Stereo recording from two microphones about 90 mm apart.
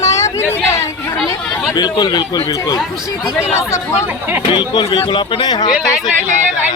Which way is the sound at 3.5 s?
35° left (ahead or behind).